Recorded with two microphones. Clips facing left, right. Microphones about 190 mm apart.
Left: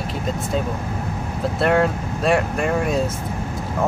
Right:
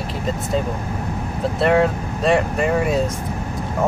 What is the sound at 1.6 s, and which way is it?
Speech, centre (ahead or behind).